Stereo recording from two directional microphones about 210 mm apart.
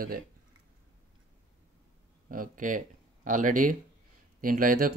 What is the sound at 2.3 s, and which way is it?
Speech, 40° right (ahead or behind).